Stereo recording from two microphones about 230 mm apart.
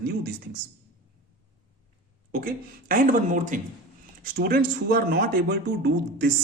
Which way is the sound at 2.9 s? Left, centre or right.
Right.